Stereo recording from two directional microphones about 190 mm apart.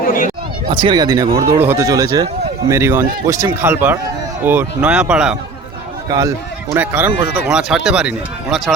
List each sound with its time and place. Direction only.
0.0 s speech: 50° left (ahead or behind)
0.7 s speech: 25° right (ahead or behind); by 5.4 s 5° right (ahead or behind)
6.1 s speech: 15° right (ahead or behind); by 8.7 s centre (ahead or behind)